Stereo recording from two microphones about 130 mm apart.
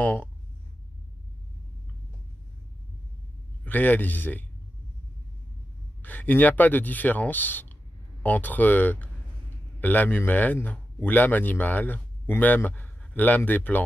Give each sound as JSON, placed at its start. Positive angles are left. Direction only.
{"t": 0.0, "sound": "speech", "side_deg": 15}
{"t": 3.6, "sound": "speech", "side_deg": 15}
{"t": 6.0, "sound": "speech", "side_deg": 15}